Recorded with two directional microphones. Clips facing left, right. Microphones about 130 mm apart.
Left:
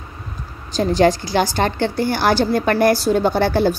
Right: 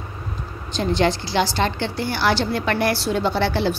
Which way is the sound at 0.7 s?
40° left (ahead or behind).